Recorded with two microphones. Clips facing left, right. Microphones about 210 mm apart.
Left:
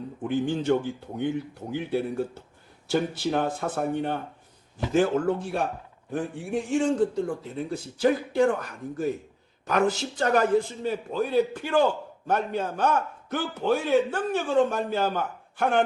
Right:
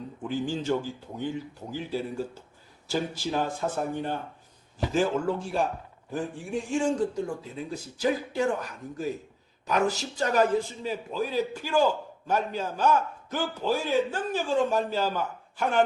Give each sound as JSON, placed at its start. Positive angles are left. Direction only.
{"t": 0.3, "sound": "a man's voice", "side_deg": 60}